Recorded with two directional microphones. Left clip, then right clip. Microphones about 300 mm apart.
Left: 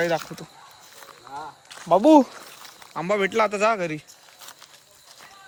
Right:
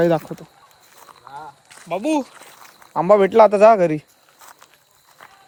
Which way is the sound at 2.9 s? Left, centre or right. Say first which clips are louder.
Right 10 dB; centre.